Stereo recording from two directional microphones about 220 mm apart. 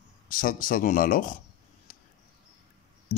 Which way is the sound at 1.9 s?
40° left (ahead or behind).